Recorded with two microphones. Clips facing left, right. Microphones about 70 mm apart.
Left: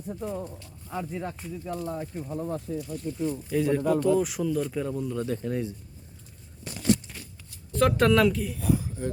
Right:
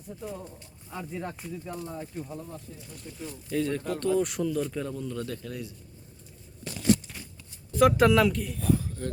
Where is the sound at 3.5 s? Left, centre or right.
Centre.